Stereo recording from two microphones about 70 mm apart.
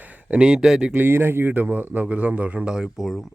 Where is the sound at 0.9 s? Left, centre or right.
Right; by 3.1 s centre.